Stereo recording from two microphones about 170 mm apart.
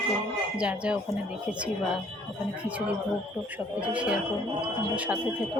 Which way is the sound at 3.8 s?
5° right (ahead or behind).